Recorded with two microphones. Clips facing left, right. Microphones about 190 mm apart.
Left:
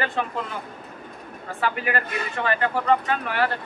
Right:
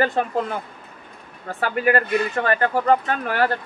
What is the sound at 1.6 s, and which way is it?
Speech, 45° right (ahead or behind).